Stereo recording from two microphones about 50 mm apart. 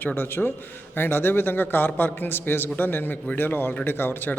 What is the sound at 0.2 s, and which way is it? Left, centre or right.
A man's voice, left.